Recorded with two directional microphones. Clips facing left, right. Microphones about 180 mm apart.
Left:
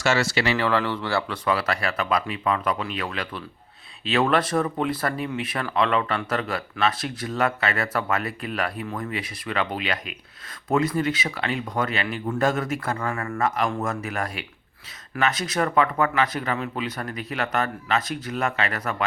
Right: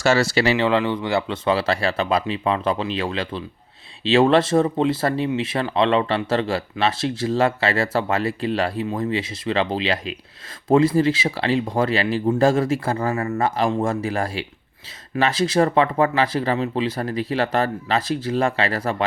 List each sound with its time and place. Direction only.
0.0 s speech: 35° right (ahead or behind)
0.5 s speech: 20° right (ahead or behind)